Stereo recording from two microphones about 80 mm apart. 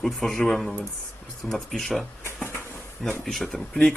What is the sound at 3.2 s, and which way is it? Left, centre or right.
Speech, centre.